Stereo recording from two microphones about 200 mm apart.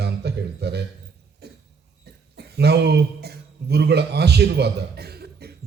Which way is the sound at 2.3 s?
55° right (ahead or behind).